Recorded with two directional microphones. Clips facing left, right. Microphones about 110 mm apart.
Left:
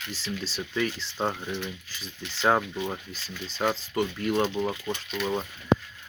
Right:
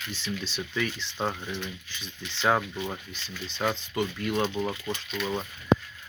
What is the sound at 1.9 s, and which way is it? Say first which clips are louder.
Speech: left 1 dB; 40° left (ahead or behind).